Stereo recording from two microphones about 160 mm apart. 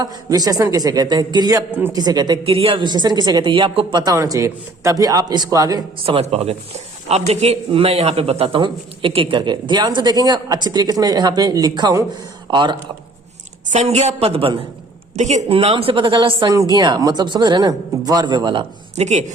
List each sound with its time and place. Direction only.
0.0 s speech: 25° right (ahead or behind)
1.7 s speech: 15° right (ahead or behind)
2.0 s speech: 25° right (ahead or behind)
3.9 s speech: 20° right (ahead or behind)
6.1 s speech: 35° right (ahead or behind)
13.7 s a woman's voice: 40° right (ahead or behind)
18.9 s speech: 45° right (ahead or behind)